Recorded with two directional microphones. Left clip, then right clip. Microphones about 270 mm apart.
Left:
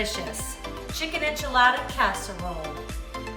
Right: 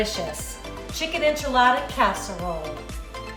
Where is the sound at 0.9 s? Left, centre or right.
Centre.